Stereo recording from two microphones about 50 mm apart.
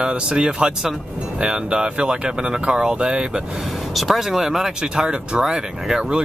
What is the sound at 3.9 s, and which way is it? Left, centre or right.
Speech, centre.